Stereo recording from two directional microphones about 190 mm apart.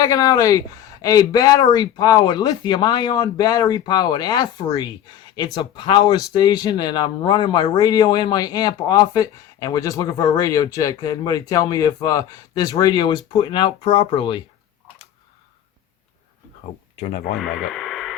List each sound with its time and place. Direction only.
0.0 s a man's voice: 20° left (ahead or behind)
17.0 s speech: 40° left (ahead or behind)
17.3 s speech: centre (ahead or behind)